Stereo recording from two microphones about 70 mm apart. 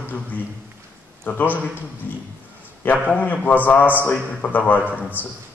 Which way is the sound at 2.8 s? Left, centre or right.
Left.